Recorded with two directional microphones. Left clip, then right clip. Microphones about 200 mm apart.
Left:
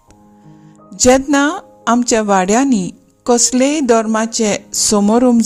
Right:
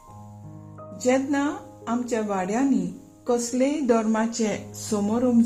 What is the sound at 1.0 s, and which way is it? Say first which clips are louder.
Speech: left 12 dB; 50° left (ahead or behind).